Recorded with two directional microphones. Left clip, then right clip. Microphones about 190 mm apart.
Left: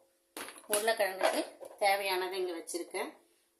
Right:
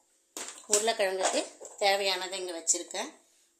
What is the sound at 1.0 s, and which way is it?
A woman's voice, 55° right (ahead or behind).